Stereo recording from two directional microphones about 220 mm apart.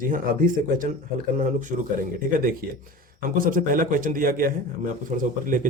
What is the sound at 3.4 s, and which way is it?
Speech, 40° right (ahead or behind).